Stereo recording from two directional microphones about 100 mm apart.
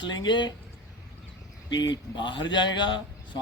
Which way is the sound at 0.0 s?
50° left (ahead or behind).